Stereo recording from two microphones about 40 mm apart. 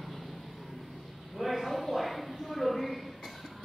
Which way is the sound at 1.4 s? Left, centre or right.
Centre.